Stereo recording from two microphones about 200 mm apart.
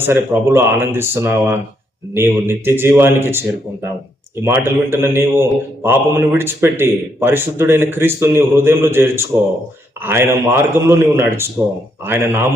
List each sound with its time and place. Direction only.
0.0 s a man's voice: 10° right (ahead or behind)